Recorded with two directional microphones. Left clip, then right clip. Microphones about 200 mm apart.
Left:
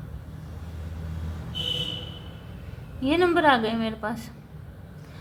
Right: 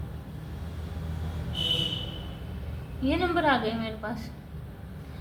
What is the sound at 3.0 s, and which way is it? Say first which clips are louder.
Speech: left 5 dB; 50° left (ahead or behind).